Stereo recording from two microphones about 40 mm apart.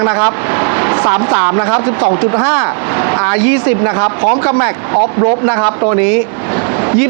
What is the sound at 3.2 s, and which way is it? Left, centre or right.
A man's voice, centre.